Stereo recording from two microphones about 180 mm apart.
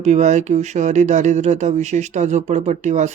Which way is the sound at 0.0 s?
40° right (ahead or behind).